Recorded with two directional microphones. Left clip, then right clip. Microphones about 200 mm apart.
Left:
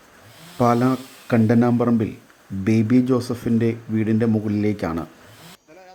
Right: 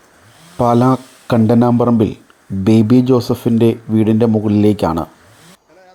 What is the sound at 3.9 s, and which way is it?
Speech, 25° right (ahead or behind).